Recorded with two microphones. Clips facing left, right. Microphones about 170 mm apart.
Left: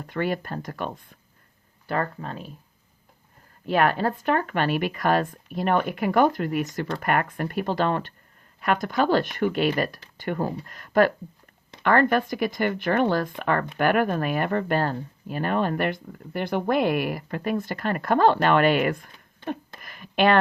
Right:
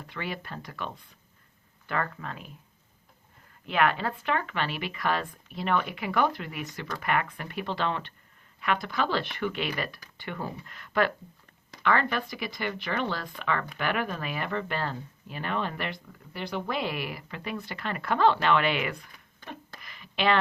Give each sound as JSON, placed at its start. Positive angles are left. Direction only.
{"t": 0.0, "sound": "speech", "side_deg": 45}
{"t": 1.9, "sound": "speech", "side_deg": 35}
{"t": 3.7, "sound": "speech", "side_deg": 40}
{"t": 19.8, "sound": "a sound", "side_deg": 50}